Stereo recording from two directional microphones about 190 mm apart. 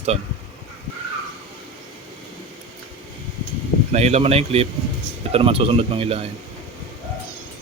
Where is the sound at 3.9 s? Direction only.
35° right (ahead or behind).